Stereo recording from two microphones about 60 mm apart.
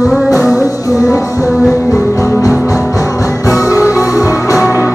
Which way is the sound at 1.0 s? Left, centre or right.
Left.